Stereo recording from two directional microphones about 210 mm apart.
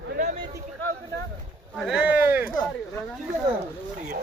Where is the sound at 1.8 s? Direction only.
5° right (ahead or behind).